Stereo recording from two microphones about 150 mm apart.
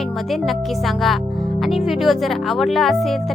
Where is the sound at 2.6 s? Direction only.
Centre (ahead or behind).